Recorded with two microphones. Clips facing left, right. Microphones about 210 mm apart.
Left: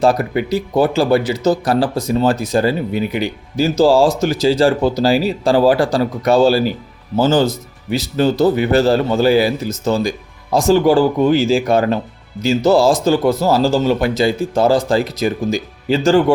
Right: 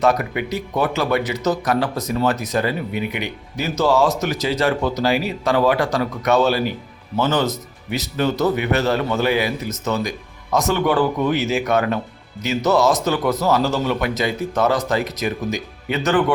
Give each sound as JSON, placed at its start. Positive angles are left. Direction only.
{"t": 0.0, "sound": "a man's voice", "side_deg": 30}